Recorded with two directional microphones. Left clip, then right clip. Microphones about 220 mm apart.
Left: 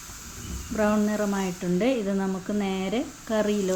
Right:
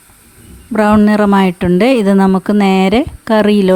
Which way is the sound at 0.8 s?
50° right (ahead or behind).